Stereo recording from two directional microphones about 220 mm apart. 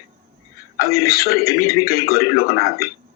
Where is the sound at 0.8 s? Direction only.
45° left (ahead or behind).